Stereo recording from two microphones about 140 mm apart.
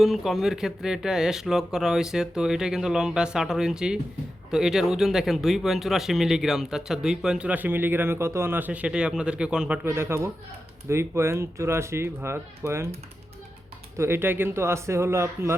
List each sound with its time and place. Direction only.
0.0 s speech: centre (ahead or behind); by 12.9 s 20° right (ahead or behind)
13.9 s speech: 20° right (ahead or behind)